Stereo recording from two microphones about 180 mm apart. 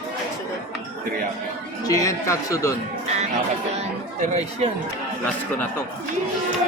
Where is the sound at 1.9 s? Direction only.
20° left (ahead or behind).